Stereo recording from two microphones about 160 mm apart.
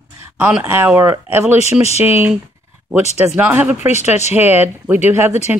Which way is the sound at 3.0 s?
45° left (ahead or behind).